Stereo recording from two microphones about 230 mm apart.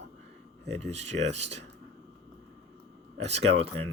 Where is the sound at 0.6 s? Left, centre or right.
Right.